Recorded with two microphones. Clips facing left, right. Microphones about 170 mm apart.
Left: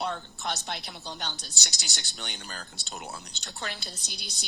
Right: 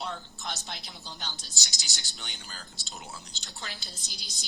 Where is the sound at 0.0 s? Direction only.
60° left (ahead or behind).